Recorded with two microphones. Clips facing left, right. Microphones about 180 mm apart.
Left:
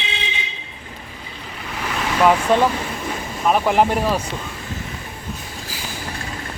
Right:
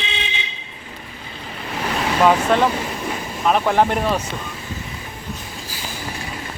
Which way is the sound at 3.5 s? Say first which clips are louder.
Even; 5° left (ahead or behind).